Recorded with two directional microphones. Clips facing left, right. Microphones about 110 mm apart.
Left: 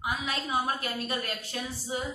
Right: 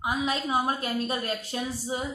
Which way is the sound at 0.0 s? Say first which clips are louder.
Right 5 dB; 30° right (ahead or behind).